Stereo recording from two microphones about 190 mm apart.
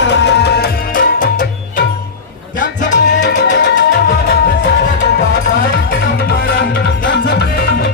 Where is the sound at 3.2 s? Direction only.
70° left (ahead or behind).